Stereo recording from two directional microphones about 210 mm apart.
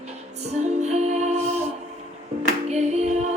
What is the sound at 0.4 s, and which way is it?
Music, 30° right (ahead or behind).